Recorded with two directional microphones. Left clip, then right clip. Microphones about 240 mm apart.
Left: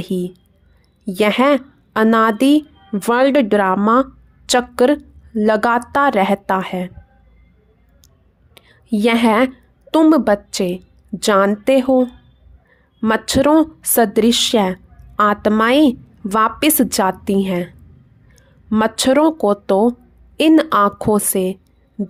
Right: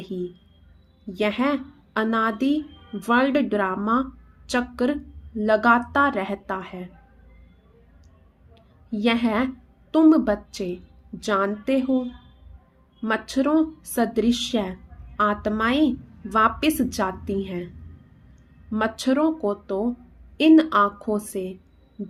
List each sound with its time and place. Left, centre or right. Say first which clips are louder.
0.0 s a woman's voice: left 8 dB; left
8.5 s a sound: left 10 dB; left
9.9 s a woman's voice: left 5 dB; left
18.7 s a woman's voice: left 9 dB; left